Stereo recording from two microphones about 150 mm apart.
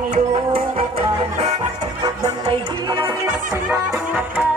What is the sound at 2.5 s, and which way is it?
Music, 30° right (ahead or behind).